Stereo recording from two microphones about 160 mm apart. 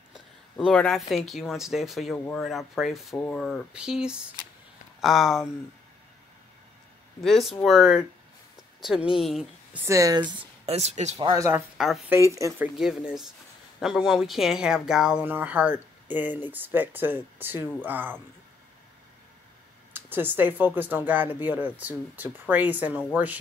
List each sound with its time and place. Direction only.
0.6 s speech: 5° left (ahead or behind)
3.7 s speech: 5° right (ahead or behind)
7.2 s speech: centre (ahead or behind)
9.8 s speech: 20° right (ahead or behind)
10.6 s speech: 40° right (ahead or behind)
11.2 s speech: 20° right (ahead or behind)
12.7 s speech: 5° right (ahead or behind)
19.9 s speech: 10° right (ahead or behind)